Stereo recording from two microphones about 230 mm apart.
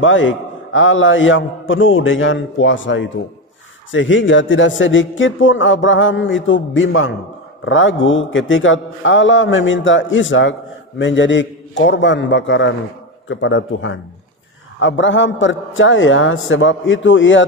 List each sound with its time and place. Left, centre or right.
0.0 s a man's voice: left